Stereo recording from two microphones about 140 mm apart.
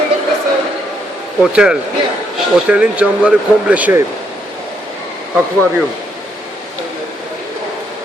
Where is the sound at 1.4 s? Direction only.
5° right (ahead or behind).